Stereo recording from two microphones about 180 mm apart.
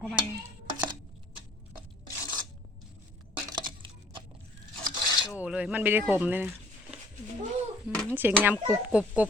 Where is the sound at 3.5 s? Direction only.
25° right (ahead or behind).